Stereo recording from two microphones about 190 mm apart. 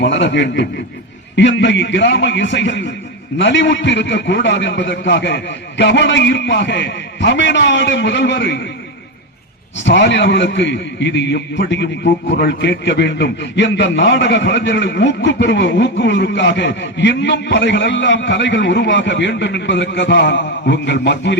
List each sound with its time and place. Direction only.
0.0 s a man's voice: 70° left (ahead or behind)
9.8 s a man's voice: 70° left (ahead or behind)